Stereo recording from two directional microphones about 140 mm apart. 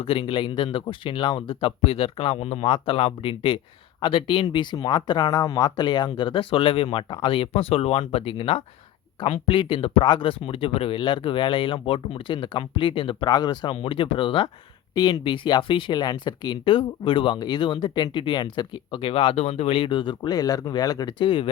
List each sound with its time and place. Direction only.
0.0 s speech: 40° left (ahead or behind)